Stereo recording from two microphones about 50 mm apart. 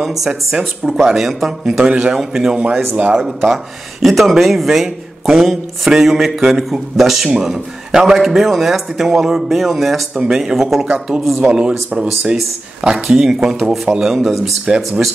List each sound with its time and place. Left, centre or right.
0.0 s a man's voice: centre
2.6 s speech: right
4.0 s speech: centre
10.2 s a man's voice: centre
14.7 s a man's voice: centre